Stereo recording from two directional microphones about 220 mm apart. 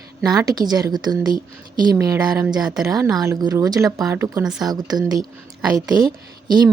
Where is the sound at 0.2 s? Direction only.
15° right (ahead or behind).